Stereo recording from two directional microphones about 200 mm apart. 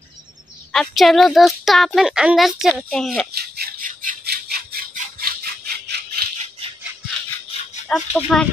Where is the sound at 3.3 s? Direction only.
50° right (ahead or behind).